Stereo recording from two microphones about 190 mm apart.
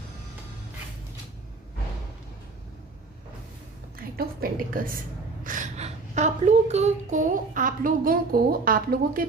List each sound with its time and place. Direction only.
3.9 s a woman's voice: 50° right (ahead or behind)